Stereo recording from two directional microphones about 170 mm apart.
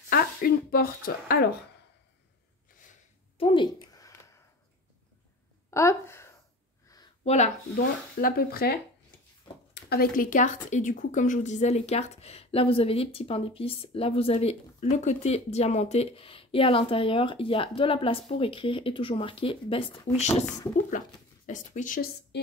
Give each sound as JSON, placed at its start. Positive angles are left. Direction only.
{"t": 0.1, "sound": "speech", "side_deg": 60}
{"t": 3.3, "sound": "a sound", "side_deg": 30}
{"t": 5.7, "sound": "speech", "side_deg": 15}
{"t": 7.2, "sound": "a woman's voice", "side_deg": 40}
{"t": 8.2, "sound": "speech", "side_deg": 60}
{"t": 9.8, "sound": "a woman's voice", "side_deg": 65}
{"t": 21.5, "sound": "speech", "side_deg": 50}